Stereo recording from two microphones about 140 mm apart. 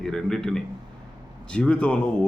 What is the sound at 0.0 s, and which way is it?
A man's voice, 5° left (ahead or behind).